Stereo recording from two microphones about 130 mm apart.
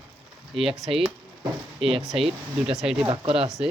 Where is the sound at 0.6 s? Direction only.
45° right (ahead or behind).